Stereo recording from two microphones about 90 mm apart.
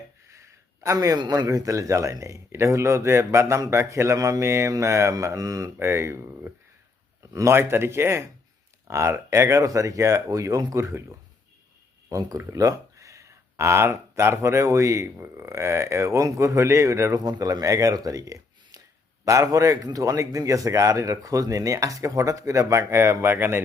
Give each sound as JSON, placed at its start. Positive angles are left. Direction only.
{"t": 0.3, "sound": "a sound", "side_deg": -35}
{"t": 1.2, "sound": "speech", "side_deg": -50}
{"t": 1.5, "sound": "a man's voice", "side_deg": -35}
{"t": 12.0, "sound": "speech", "side_deg": -40}